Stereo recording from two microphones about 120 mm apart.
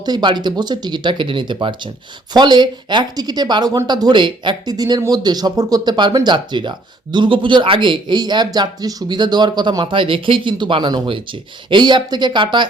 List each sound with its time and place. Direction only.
0.0 s speech: 35° right (ahead or behind)